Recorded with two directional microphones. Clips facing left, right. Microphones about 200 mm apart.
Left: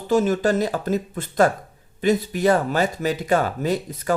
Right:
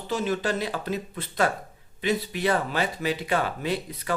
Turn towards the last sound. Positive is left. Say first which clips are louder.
# left 5 dB
turn(degrees=45)  # may be behind; listen again after turning